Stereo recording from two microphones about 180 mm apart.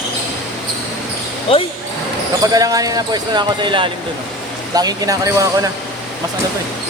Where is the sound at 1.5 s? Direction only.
30° left (ahead or behind).